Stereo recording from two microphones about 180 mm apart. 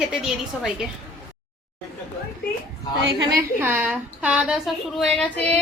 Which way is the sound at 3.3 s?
10° right (ahead or behind).